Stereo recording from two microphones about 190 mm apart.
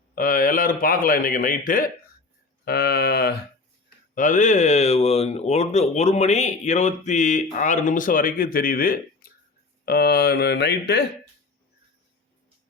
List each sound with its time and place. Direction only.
0.2 s a man's voice: 45° left (ahead or behind)
2.6 s mantra: 55° left (ahead or behind)
4.1 s speech: 45° left (ahead or behind); by 11.0 s 60° left (ahead or behind)